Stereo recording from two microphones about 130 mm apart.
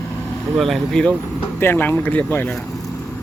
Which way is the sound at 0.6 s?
Centre (ahead or behind).